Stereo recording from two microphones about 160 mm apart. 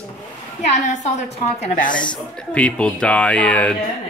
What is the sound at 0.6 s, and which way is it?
A woman's voice, 50° left (ahead or behind).